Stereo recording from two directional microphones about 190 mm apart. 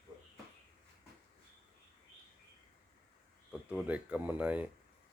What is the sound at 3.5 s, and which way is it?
Speech, 5° right (ahead or behind).